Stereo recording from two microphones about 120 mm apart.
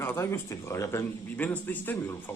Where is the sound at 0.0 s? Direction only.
20° left (ahead or behind).